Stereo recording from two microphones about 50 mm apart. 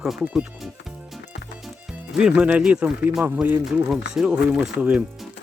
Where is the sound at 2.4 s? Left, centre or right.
Right.